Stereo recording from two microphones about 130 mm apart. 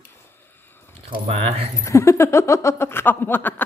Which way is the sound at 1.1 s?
50° right (ahead or behind).